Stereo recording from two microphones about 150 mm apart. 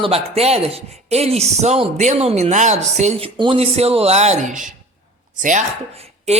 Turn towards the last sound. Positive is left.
turn(degrees=-45)  # may be behind; listen again after turning